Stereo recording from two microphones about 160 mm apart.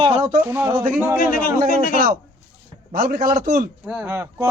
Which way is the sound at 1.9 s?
60° right (ahead or behind).